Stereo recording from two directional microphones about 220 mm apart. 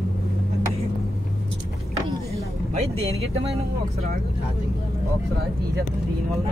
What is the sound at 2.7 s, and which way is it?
Speech, 30° right (ahead or behind).